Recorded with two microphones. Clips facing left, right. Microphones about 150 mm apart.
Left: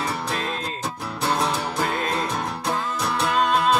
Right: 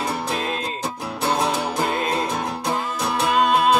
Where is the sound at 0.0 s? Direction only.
15° right (ahead or behind).